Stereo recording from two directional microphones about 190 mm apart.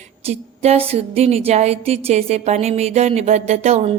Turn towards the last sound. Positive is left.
turn(degrees=-35)  # may be behind; listen again after turning